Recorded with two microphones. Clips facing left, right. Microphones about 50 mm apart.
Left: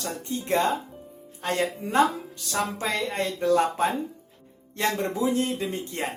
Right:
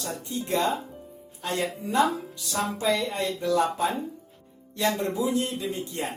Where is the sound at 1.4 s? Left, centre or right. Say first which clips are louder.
Left 2 dB; left.